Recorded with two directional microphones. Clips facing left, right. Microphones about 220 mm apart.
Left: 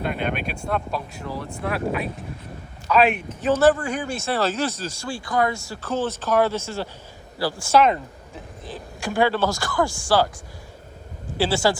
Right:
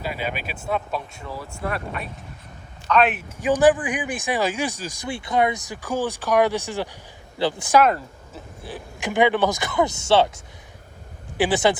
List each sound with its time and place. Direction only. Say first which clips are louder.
0.0 s speech: left 3 dB; 5° right (ahead or behind)
3.4 s a man's voice: right 1 dB; 15° right (ahead or behind)